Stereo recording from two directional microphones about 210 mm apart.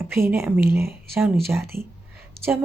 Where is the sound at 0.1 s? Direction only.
10° right (ahead or behind).